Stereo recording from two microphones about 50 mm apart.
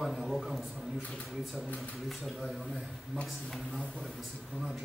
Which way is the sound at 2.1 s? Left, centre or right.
Centre.